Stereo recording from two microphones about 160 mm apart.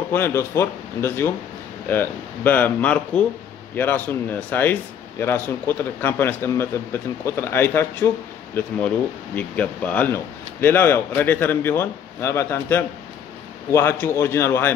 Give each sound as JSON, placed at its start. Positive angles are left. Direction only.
{"t": 0.1, "sound": "speech", "side_deg": 15}